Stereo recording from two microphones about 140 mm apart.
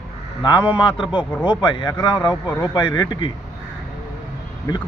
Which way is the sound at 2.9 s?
30° left (ahead or behind).